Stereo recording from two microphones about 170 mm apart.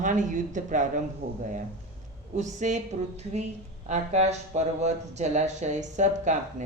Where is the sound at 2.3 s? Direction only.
45° right (ahead or behind).